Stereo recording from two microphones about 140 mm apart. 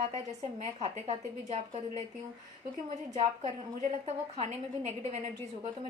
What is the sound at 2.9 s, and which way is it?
A woman's voice, 50° right (ahead or behind).